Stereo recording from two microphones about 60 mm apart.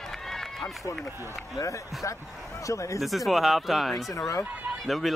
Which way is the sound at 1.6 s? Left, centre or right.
Left.